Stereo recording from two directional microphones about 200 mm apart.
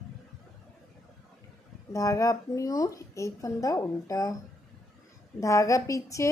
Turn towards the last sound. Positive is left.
turn(degrees=15)  # may be behind; listen again after turning